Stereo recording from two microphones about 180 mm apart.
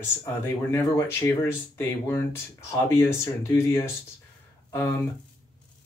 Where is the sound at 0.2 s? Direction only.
15° left (ahead or behind).